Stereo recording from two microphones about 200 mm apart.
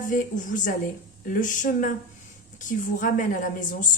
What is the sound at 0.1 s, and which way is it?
A woman's voice, 40° left (ahead or behind).